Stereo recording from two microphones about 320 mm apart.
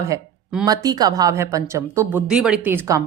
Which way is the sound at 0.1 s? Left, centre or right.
Centre.